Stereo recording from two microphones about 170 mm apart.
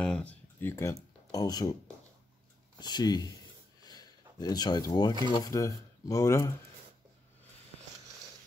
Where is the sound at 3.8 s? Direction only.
25° left (ahead or behind).